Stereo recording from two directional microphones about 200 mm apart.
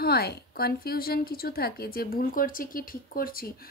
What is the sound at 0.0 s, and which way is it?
A woman's voice, 50° left (ahead or behind).